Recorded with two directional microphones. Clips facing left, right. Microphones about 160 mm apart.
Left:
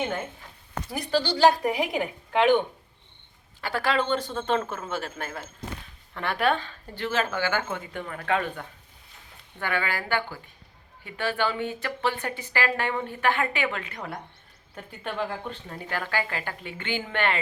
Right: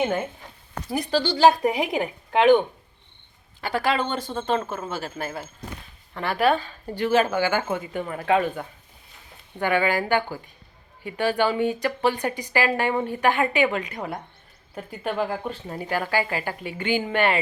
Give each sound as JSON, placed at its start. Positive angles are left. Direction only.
{"t": 0.9, "sound": "a woman's voice", "side_deg": -25}
{"t": 3.6, "sound": "speech", "side_deg": -15}
{"t": 4.7, "sound": "speech", "side_deg": -5}